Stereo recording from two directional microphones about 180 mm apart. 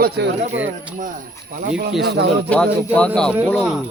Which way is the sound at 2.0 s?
70° right (ahead or behind).